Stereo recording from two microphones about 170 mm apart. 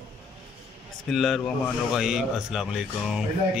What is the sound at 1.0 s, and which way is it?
A man's voice, centre (ahead or behind).